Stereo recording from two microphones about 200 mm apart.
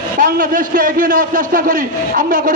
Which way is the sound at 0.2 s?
45° right (ahead or behind).